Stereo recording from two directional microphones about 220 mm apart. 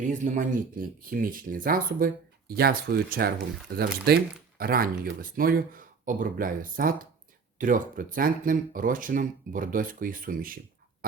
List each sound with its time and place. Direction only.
0.0 s speech: 35° right (ahead or behind)